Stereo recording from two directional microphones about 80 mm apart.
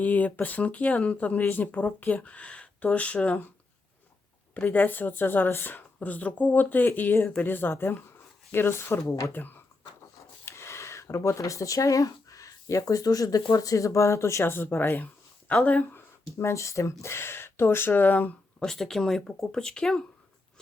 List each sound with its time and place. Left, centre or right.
0.0 s speech: centre
4.5 s speech: centre; by 9.3 s left
9.3 s speech: left
10.4 s speech: left; by 16.0 s centre
16.0 s speech: left
18.6 s speech: centre